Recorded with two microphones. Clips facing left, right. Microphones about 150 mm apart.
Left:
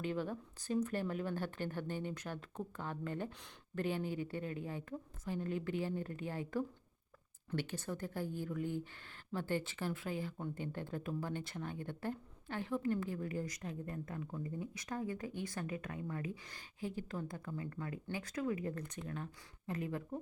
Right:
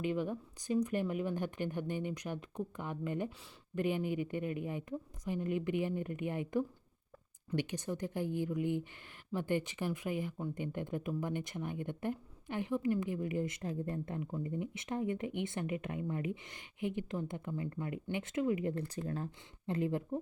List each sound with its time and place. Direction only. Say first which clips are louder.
0.0 s speech: right 4 dB; 15° right (ahead or behind)